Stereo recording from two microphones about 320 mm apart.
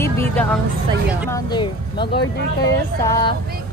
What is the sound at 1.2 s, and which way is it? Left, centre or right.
Vehicle, centre.